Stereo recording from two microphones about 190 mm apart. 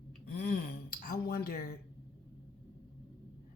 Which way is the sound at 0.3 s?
55° left (ahead or behind).